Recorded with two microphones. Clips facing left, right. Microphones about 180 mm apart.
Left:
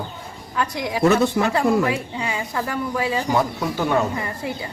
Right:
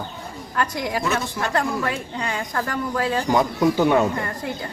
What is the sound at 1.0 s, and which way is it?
Speech, 65° left (ahead or behind).